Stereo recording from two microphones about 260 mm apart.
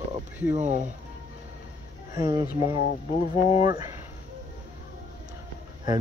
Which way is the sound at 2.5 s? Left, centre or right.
Left.